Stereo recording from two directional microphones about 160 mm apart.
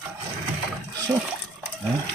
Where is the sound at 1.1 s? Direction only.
20° right (ahead or behind).